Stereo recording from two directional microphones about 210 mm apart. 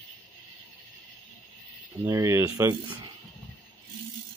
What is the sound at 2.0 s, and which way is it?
Speech, 15° right (ahead or behind).